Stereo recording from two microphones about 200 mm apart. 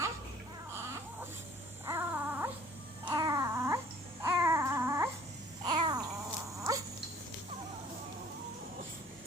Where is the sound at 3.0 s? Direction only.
15° right (ahead or behind).